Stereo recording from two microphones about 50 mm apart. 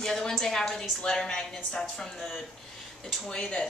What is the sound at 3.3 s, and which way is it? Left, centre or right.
Speech, centre.